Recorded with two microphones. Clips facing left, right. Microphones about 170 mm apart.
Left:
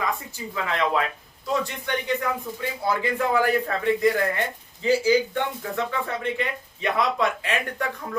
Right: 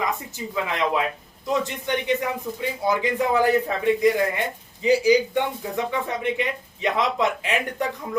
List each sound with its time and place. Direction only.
0.0 s a man's voice: 20° right (ahead or behind)